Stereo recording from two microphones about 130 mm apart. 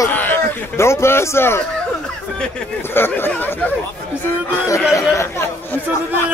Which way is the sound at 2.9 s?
15° left (ahead or behind).